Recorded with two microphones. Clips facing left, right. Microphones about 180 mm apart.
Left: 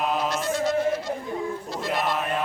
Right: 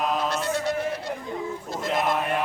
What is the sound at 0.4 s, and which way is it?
Chant, 60° right (ahead or behind).